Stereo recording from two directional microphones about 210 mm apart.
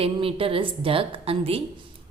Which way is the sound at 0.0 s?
25° right (ahead or behind).